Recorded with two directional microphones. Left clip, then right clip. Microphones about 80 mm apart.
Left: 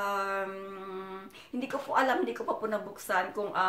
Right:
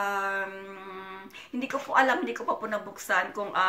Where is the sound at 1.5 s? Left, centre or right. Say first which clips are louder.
Right 4 dB; left.